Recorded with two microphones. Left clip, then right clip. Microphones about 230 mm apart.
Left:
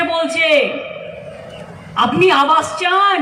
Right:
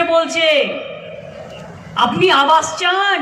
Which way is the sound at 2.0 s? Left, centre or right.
Centre.